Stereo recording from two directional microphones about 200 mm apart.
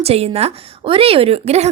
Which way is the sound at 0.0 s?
30° right (ahead or behind).